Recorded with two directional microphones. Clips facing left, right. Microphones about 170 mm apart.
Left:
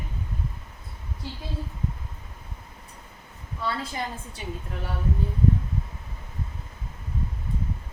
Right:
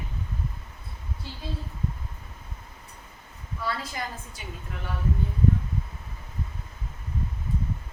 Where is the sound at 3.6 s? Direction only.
25° left (ahead or behind).